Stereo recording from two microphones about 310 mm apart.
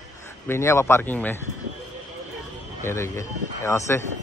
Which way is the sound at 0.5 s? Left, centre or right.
Centre.